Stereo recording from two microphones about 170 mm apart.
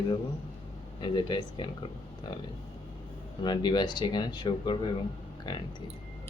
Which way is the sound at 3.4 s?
25° left (ahead or behind).